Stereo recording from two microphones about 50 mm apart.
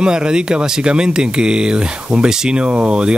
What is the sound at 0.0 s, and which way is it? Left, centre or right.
Speech, centre.